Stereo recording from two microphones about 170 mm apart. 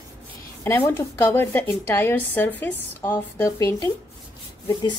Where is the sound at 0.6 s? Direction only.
15° left (ahead or behind).